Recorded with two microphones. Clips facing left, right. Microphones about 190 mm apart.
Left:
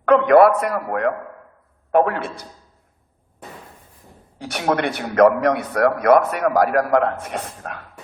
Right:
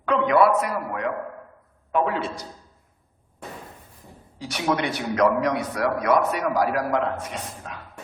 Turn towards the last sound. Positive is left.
turn(degrees=55)  # may be behind; listen again after turning